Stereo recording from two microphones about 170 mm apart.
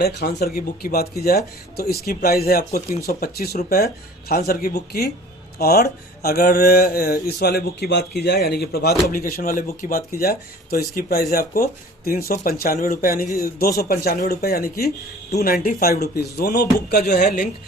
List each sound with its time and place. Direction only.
0.0 s speech: 75° left (ahead or behind)
9.1 s speech: 60° left (ahead or behind)
17.2 s a woman's voice: 50° left (ahead or behind)